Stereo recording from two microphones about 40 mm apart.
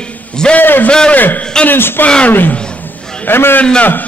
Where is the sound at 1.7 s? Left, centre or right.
Left.